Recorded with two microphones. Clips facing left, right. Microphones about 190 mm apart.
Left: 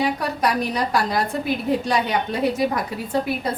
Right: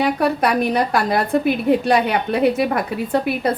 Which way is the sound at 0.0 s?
60° right (ahead or behind).